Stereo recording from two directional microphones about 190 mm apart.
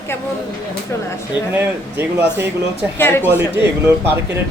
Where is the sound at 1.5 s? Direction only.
10° right (ahead or behind).